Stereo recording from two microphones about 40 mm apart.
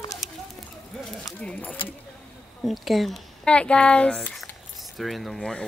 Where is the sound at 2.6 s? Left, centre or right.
Centre.